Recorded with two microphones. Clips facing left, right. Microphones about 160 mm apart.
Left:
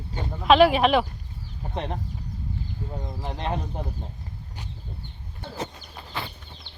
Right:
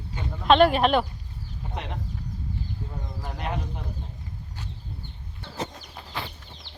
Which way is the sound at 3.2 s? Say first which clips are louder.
Left 2 dB; 25° left (ahead or behind).